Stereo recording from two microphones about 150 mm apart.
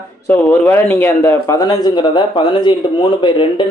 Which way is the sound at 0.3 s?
15° left (ahead or behind).